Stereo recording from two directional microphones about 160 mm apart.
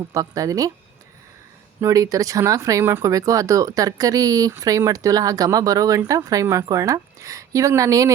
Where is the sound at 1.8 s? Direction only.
20° right (ahead or behind).